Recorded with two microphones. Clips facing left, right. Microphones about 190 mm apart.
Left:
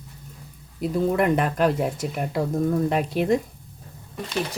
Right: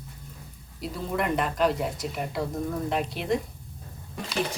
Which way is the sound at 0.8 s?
55° left (ahead or behind).